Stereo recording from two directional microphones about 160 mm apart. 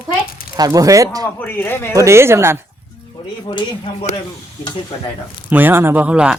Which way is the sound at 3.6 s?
35° left (ahead or behind).